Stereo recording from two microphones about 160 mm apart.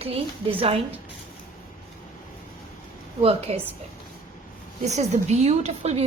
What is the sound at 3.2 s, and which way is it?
Speech, 35° right (ahead or behind).